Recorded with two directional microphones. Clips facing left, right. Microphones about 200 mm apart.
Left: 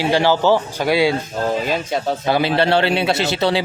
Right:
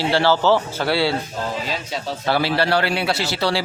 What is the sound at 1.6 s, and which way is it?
Speech, 55° left (ahead or behind).